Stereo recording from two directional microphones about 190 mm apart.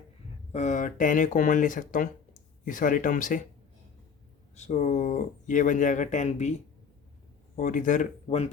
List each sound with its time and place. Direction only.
0.5 s speech: 40° left (ahead or behind)
4.5 s speech: 35° left (ahead or behind)